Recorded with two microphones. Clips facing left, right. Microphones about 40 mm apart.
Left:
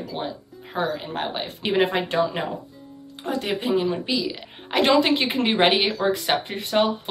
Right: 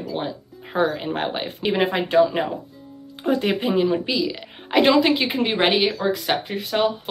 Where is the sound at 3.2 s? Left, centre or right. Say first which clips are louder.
Right 5 dB; right.